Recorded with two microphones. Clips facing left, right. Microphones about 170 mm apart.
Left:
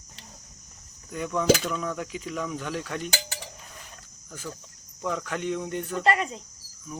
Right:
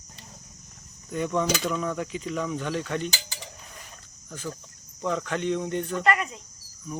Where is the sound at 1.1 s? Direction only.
5° left (ahead or behind).